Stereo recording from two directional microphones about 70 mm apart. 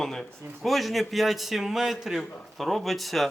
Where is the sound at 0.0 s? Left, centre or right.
Centre.